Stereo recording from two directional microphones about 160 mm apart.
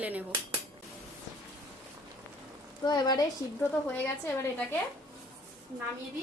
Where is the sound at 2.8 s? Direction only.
25° left (ahead or behind).